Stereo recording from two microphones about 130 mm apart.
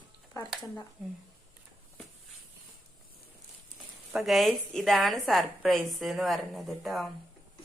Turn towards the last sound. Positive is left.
turn(degrees=0)  # may be behind; listen again after turning